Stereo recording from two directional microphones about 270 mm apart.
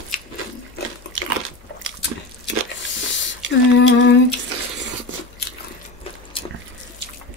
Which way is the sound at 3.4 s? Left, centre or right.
Right.